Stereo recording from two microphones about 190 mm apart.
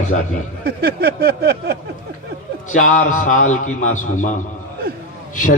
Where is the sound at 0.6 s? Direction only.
55° right (ahead or behind).